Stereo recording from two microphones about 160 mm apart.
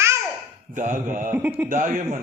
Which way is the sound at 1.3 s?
10° right (ahead or behind).